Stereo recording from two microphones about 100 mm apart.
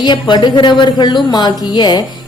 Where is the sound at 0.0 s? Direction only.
45° left (ahead or behind).